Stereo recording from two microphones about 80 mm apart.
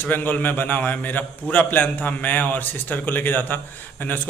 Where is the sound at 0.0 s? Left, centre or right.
Left.